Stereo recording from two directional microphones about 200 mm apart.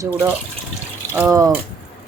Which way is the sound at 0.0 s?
10° right (ahead or behind).